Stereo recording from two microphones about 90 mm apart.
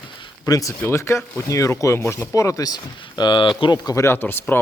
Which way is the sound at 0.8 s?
30° left (ahead or behind).